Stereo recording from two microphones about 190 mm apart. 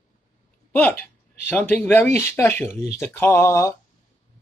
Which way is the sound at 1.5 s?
10° left (ahead or behind).